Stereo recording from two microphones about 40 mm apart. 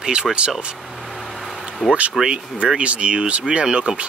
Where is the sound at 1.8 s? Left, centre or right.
Centre.